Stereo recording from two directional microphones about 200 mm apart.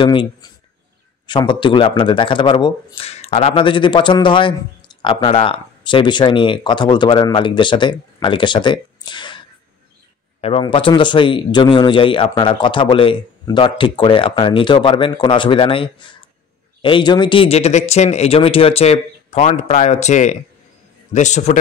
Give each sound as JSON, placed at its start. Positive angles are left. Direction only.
{"t": 0.0, "sound": "a man's voice", "side_deg": 25}
{"t": 10.4, "sound": "a man's voice", "side_deg": 25}